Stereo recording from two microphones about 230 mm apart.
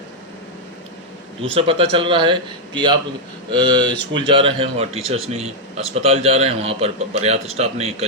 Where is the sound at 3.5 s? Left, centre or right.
Centre.